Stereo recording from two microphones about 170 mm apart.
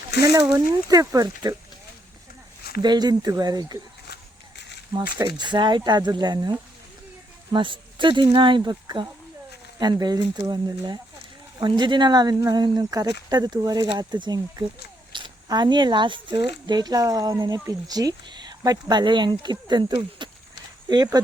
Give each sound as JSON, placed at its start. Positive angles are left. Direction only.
{"t": 0.1, "sound": "speech", "side_deg": 70}
{"t": 0.3, "sound": "speech", "side_deg": -20}
{"t": 2.8, "sound": "speech", "side_deg": -25}
{"t": 4.1, "sound": "a sound", "side_deg": 85}
{"t": 5.4, "sound": "speech", "side_deg": -25}